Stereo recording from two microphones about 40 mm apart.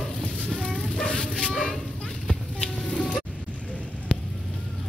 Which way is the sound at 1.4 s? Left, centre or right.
Centre.